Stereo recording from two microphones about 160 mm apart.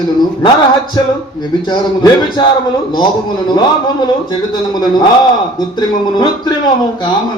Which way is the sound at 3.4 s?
25° left (ahead or behind).